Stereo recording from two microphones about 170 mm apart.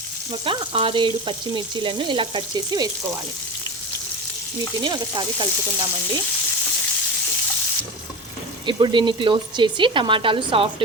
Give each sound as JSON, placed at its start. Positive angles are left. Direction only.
{"t": 0.4, "sound": "frying", "side_deg": -30}
{"t": 4.8, "sound": "frying", "side_deg": -25}
{"t": 8.6, "sound": "frying", "side_deg": -30}